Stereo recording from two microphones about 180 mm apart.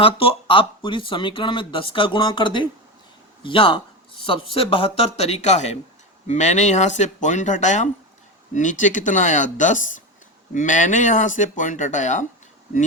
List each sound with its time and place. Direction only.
0.0 s speech: 30° left (ahead or behind)